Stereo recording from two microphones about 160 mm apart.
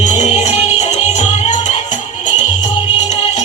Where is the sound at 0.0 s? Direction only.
45° left (ahead or behind).